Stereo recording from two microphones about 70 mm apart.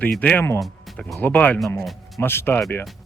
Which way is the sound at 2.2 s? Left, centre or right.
Left.